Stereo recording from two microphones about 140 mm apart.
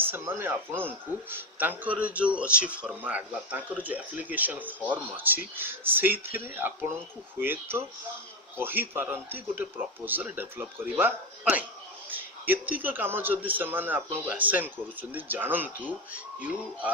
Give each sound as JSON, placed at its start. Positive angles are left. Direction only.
{"t": 0.0, "sound": "speech", "side_deg": -15}